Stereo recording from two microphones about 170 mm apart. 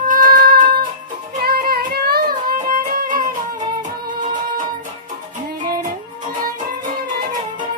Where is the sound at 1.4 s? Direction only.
65° right (ahead or behind).